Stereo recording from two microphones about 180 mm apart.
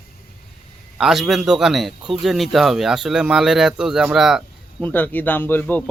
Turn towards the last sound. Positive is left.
turn(degrees=10)  # may be behind; listen again after turning